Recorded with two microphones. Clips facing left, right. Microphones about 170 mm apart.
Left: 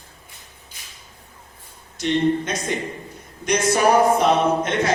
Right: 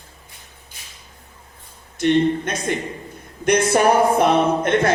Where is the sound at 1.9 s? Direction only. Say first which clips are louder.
Right 3 dB; 55° right (ahead or behind).